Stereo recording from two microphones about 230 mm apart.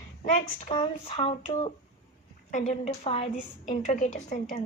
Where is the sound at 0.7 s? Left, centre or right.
Left.